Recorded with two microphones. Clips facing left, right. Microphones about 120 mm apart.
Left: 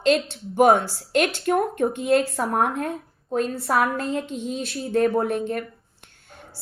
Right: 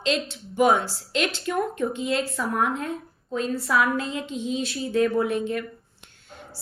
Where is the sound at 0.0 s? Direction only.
50° left (ahead or behind).